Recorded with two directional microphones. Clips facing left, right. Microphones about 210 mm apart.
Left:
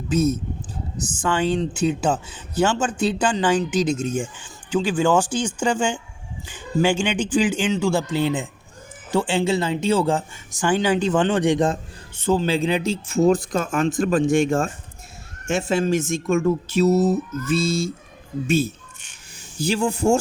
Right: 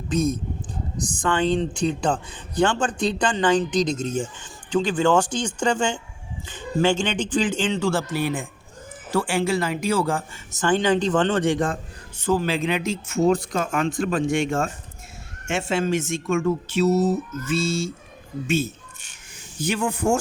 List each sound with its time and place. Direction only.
0.1 s a man's voice: 5° left (ahead or behind); by 14.7 s 40° left (ahead or behind)
15.7 s a man's voice: 40° left (ahead or behind)